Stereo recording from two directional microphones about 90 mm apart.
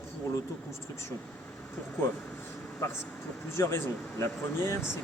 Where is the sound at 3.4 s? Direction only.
30° left (ahead or behind).